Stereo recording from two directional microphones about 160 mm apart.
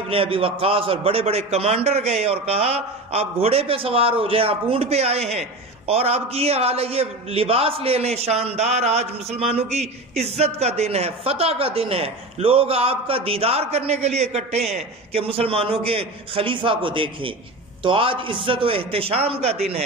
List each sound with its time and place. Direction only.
0.1 s a man's voice: 35° right (ahead or behind)